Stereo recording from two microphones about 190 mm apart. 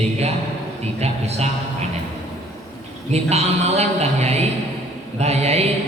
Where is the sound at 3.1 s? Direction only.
35° right (ahead or behind).